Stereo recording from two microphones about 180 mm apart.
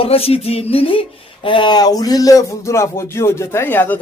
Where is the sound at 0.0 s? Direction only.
30° left (ahead or behind).